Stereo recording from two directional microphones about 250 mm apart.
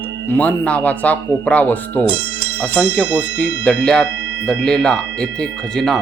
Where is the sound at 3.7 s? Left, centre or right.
Centre.